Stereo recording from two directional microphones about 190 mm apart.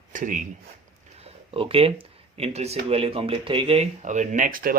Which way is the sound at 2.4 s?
35° right (ahead or behind).